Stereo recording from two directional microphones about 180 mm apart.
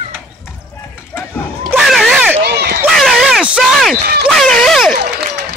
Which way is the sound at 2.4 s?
65° right (ahead or behind).